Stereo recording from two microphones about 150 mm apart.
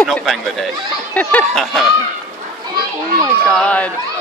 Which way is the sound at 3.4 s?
5° left (ahead or behind).